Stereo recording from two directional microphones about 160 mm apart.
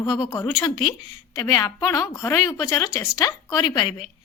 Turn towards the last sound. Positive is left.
turn(degrees=25)  # may be behind; listen again after turning